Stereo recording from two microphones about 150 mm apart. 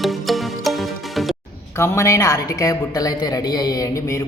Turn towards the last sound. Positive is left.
turn(degrees=20)  # may be behind; listen again after turning